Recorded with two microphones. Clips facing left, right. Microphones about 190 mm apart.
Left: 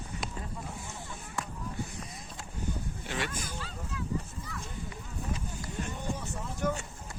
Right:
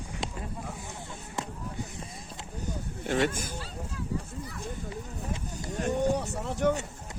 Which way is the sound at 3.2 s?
45° right (ahead or behind).